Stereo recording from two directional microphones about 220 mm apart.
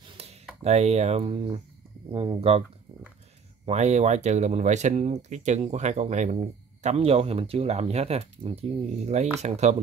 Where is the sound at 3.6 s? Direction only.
30° right (ahead or behind).